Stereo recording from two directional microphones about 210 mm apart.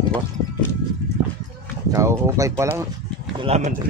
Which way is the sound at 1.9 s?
15° right (ahead or behind).